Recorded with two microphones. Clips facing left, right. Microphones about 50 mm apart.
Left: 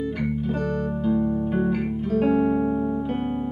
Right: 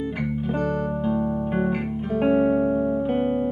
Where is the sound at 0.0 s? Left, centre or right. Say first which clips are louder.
Left 1 dB; centre.